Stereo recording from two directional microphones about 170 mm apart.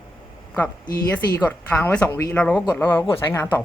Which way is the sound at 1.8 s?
10° left (ahead or behind).